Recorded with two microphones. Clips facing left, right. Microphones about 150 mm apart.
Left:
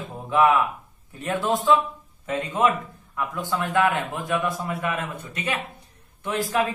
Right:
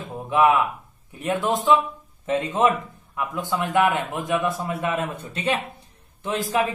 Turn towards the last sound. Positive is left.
turn(degrees=-20)  # may be behind; listen again after turning